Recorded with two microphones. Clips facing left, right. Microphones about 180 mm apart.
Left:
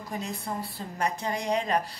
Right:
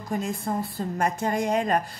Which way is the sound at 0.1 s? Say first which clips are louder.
Right 6 dB; 50° right (ahead or behind).